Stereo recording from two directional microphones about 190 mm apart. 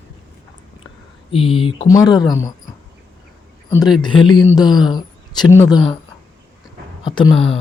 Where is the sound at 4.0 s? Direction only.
25° left (ahead or behind).